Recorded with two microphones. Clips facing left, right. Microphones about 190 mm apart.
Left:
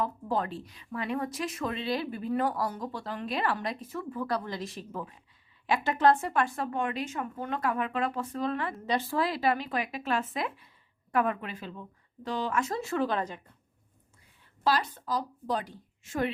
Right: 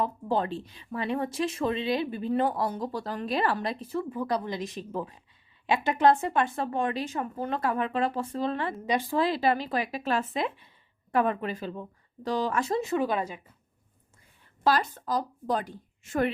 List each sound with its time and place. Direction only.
0.0 s a woman's voice: 25° right (ahead or behind)
4.1 s a woman's voice: 20° right (ahead or behind)
8.9 s speech: 15° right (ahead or behind)
9.2 s speech: 30° right (ahead or behind)
12.8 s speech: 15° right (ahead or behind)
14.6 s a woman's voice: 50° right (ahead or behind)